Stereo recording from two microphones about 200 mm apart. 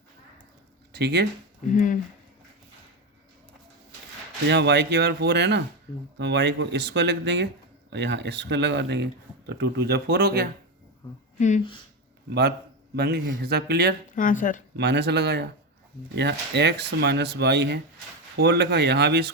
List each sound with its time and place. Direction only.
0.9 s speech: 55° right (ahead or behind)
1.6 s speech: 40° left (ahead or behind)
4.4 s speech: 60° right (ahead or behind)
11.3 s speech: 35° left (ahead or behind)
12.3 s speech: 55° right (ahead or behind)
14.2 s speech: 40° left (ahead or behind)
14.8 s speech: 55° right (ahead or behind)